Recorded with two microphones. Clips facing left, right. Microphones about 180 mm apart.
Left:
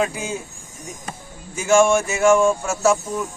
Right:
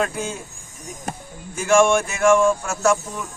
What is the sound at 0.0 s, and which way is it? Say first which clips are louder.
Speech: left 1 dB; 5° left (ahead or behind).